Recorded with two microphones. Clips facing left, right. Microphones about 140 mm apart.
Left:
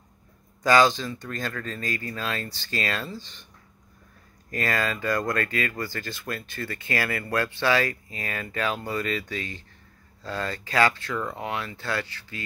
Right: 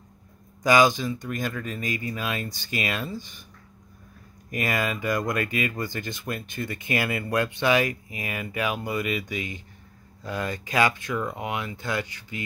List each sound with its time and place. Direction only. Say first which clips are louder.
0.7 s speech: even; 15° right (ahead or behind)
4.5 s speech: even; 15° right (ahead or behind)